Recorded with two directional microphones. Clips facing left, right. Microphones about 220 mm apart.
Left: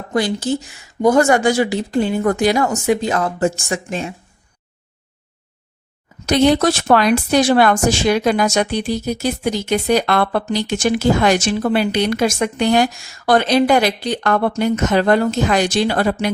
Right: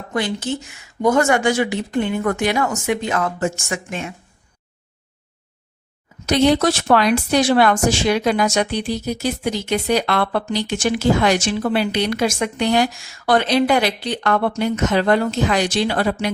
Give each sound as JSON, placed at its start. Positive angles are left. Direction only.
{"t": 0.1, "sound": "speech", "side_deg": 35}
{"t": 6.2, "sound": "speech", "side_deg": 45}